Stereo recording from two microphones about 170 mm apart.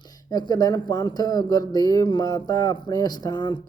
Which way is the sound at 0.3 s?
25° left (ahead or behind).